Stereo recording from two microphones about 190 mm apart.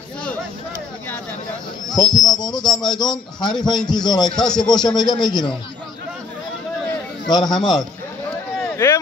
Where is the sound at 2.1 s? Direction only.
20° left (ahead or behind).